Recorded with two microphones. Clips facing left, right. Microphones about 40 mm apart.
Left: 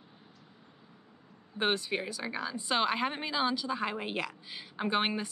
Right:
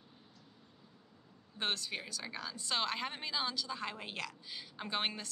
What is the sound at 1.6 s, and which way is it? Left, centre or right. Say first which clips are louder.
Speech: left 7 dB; left.